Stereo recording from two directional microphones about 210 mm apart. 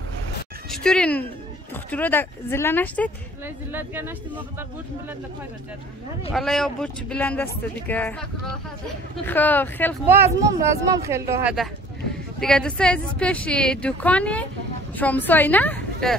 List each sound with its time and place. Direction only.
0.7 s speech: 5° left (ahead or behind)
3.4 s speech: 10° right (ahead or behind)
6.3 s a woman's voice: centre (ahead or behind)
10.0 s speech: 10° right (ahead or behind)
12.4 s a woman's voice: 5° left (ahead or behind)